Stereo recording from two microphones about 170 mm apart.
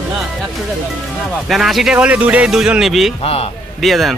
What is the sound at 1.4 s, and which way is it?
Speech, centre (ahead or behind).